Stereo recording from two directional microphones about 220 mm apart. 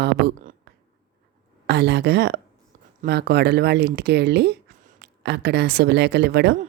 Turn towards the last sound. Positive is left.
turn(degrees=-45)  # may be behind; listen again after turning